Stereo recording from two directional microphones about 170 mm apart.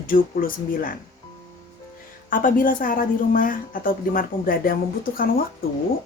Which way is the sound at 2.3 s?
55° left (ahead or behind).